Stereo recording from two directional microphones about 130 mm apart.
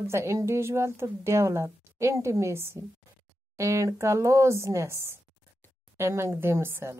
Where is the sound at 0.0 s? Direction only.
20° right (ahead or behind).